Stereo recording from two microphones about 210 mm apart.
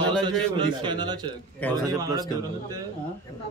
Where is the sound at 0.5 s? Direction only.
20° right (ahead or behind).